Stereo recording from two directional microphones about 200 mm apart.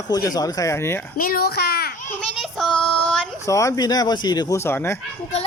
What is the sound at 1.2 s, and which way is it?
Speech, 45° left (ahead or behind).